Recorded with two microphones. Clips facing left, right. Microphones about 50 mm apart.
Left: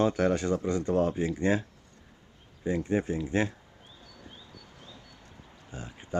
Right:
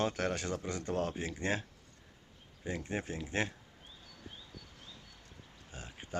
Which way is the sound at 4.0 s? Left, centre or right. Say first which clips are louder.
Left 2 dB; centre.